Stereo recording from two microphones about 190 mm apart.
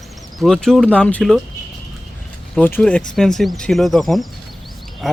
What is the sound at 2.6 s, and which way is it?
Speech, 10° left (ahead or behind).